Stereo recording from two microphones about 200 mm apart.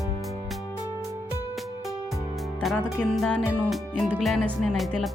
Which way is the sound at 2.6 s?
Centre (ahead or behind).